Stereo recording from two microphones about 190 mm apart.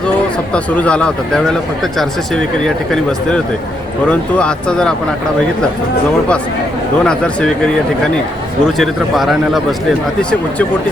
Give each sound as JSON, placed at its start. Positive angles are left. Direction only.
{"t": 0.5, "sound": "speech", "side_deg": 5}
{"t": 7.0, "sound": "speech", "side_deg": 5}